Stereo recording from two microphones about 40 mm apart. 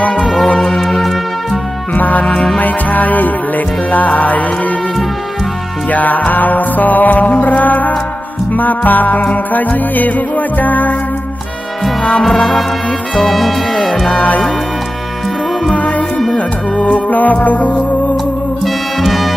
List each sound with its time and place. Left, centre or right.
0.2 s music: centre
2.0 s music: left
2.2 s music: left
2.6 s music: left
5.9 s music: left
12.2 s music: centre
14.1 s music: left
15.7 s music: left
18.6 s music: centre